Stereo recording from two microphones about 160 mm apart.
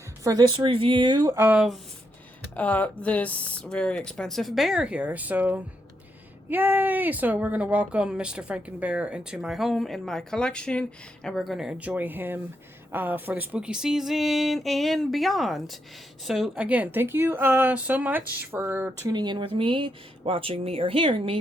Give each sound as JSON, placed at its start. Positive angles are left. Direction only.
{"t": 0.3, "sound": "speech", "side_deg": -30}
{"t": 2.6, "sound": "speech", "side_deg": 10}
{"t": 19.1, "sound": "speech", "side_deg": -25}